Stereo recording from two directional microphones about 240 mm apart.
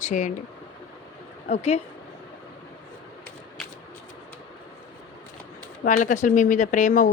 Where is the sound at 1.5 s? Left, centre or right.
Left.